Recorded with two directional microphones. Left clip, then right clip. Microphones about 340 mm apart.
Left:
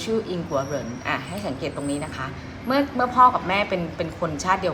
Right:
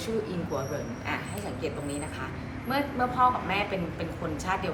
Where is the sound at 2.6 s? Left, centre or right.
Centre.